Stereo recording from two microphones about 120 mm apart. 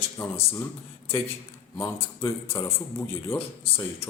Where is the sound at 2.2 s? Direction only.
25° left (ahead or behind).